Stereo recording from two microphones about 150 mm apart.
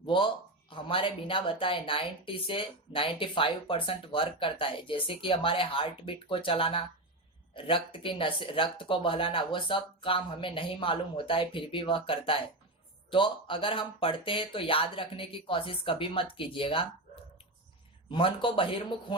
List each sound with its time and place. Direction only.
0.0 s speech: 35° left (ahead or behind)
18.1 s speech: 35° left (ahead or behind)